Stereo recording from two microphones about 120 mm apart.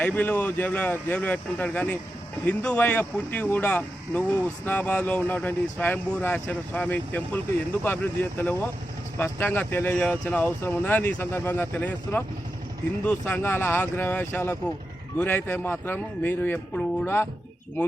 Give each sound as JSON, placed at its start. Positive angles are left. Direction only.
{"t": 0.0, "sound": "speech", "side_deg": 15}